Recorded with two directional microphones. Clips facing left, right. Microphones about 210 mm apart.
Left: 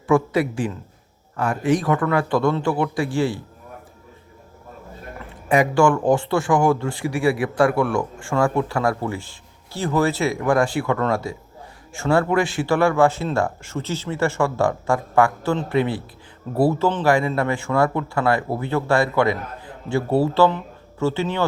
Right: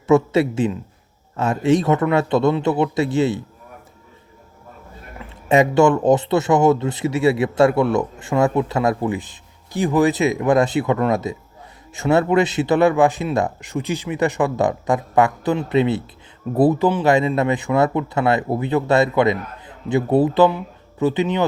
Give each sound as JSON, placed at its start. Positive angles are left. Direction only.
{"t": 0.1, "sound": "a man's voice", "side_deg": -25}
{"t": 5.5, "sound": "a man's voice", "side_deg": -25}